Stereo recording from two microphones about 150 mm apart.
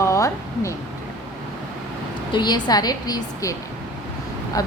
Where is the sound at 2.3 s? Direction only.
30° left (ahead or behind).